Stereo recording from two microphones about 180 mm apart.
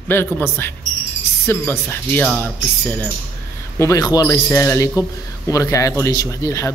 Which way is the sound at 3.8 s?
20° left (ahead or behind).